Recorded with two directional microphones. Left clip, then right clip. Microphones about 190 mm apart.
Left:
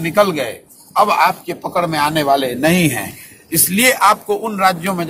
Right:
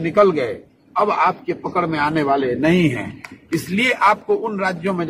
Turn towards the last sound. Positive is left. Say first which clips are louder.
# left 6 dB
turn(degrees=10)  # may be behind; listen again after turning